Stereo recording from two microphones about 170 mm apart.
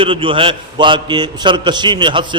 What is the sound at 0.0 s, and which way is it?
A man's voice, 30° right (ahead or behind).